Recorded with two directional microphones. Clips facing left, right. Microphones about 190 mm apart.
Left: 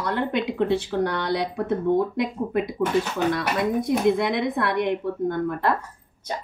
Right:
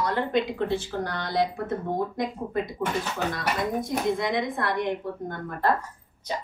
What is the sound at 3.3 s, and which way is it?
A woman's voice, 65° left (ahead or behind).